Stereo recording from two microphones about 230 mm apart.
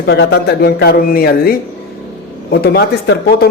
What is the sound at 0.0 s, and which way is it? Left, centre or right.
Speech, left.